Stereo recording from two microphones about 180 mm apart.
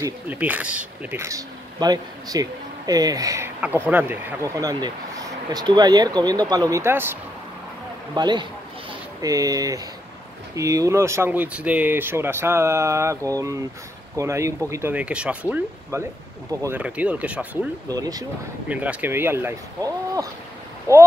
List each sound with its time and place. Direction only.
0.0 s speech: 10° right (ahead or behind)
8.1 s speech: 25° right (ahead or behind); by 17.5 s 5° right (ahead or behind)
17.8 s speech: 20° right (ahead or behind)
18.7 s speech: 10° right (ahead or behind)